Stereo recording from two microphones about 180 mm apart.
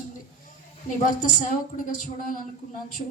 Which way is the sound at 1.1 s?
50° left (ahead or behind).